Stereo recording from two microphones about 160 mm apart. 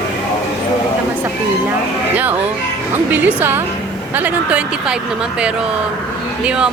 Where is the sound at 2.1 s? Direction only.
10° right (ahead or behind).